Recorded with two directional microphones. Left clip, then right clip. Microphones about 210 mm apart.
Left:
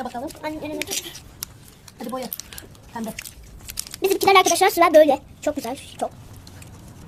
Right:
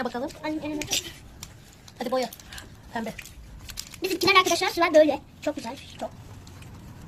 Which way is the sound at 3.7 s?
35° left (ahead or behind).